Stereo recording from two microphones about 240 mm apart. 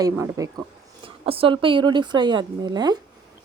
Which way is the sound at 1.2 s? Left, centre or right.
Right.